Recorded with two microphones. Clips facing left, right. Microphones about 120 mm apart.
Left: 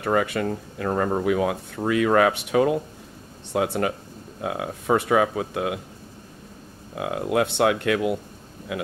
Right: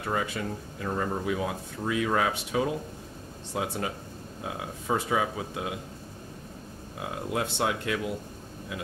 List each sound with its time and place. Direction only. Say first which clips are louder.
0.0 s speech: left 8 dB; 65° left (ahead or behind)
7.0 s speech: left 8 dB; 70° left (ahead or behind)